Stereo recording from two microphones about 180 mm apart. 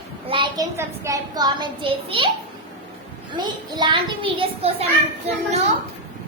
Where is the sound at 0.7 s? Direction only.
15° right (ahead or behind).